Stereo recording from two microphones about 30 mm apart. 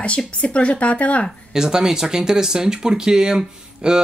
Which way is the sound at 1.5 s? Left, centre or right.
Centre.